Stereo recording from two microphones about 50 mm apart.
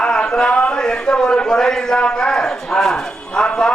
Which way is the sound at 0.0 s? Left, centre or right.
Centre.